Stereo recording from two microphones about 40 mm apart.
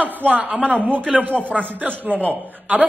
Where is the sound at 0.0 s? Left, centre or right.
Right.